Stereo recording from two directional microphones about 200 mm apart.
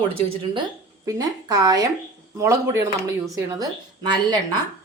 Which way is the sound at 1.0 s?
20° right (ahead or behind).